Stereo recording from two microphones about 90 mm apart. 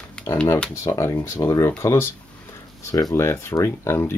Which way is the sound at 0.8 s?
35° left (ahead or behind).